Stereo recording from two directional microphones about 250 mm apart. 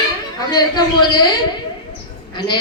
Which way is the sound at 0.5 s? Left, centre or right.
Centre.